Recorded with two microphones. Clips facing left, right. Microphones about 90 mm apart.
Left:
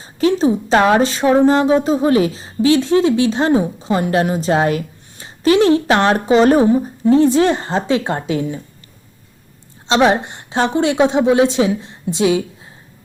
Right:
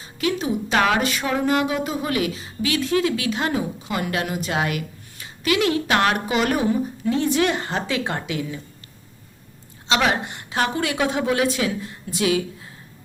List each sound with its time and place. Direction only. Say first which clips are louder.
0.0 s a woman's voice: left 9 dB; 30° left (ahead or behind)
9.8 s a woman's voice: left 7 dB; 30° left (ahead or behind)